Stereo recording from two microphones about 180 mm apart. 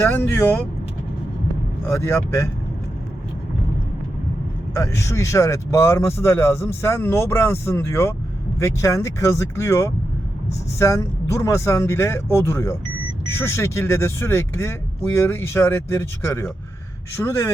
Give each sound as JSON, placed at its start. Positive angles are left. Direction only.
{"t": 0.0, "sound": "speech", "side_deg": 15}
{"t": 1.9, "sound": "speech", "side_deg": 15}
{"t": 4.7, "sound": "speech", "side_deg": 15}